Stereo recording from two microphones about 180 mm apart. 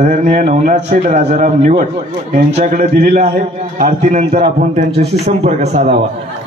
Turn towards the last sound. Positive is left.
turn(degrees=-35)  # may be behind; listen again after turning